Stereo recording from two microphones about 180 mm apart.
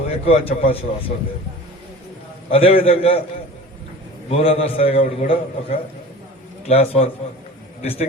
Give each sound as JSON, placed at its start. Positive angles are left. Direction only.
{"t": 0.3, "sound": "a man's voice", "side_deg": 35}
{"t": 2.5, "sound": "a man's voice", "side_deg": 35}
{"t": 4.3, "sound": "a man's voice", "side_deg": 35}